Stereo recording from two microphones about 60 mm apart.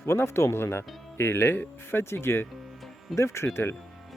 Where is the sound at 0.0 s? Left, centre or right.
Left.